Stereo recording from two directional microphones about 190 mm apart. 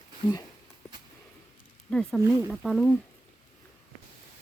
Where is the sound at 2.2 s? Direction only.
15° right (ahead or behind).